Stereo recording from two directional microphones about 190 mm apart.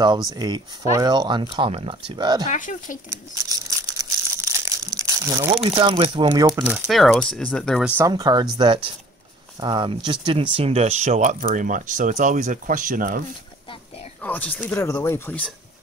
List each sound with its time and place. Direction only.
0.3 s speech: 20° right (ahead or behind)
2.5 s speech: 45° left (ahead or behind)
3.1 s crumpling: 20° right (ahead or behind)
5.5 s speech: 30° right (ahead or behind)
6.3 s speech: 10° right (ahead or behind)
8.0 s speech: 20° right (ahead or behind); by 13.2 s 45° right (ahead or behind)
14.2 s speech: 10° left (ahead or behind)